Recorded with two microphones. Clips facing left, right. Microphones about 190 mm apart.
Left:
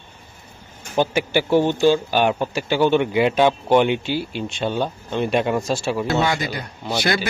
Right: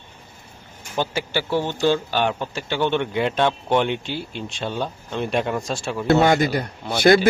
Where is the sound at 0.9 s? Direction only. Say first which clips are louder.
Left 5 dB; 15° left (ahead or behind).